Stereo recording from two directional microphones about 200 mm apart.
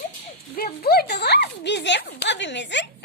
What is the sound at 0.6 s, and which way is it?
Speech, 50° left (ahead or behind).